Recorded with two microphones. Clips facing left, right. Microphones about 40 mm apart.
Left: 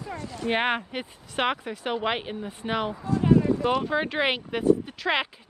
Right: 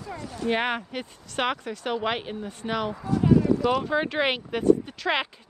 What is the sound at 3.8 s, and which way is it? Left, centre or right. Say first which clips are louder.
Speech: even; centre.